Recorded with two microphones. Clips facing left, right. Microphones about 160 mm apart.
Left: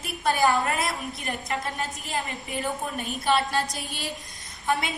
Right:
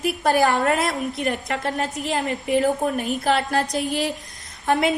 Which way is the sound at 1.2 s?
75° right (ahead or behind).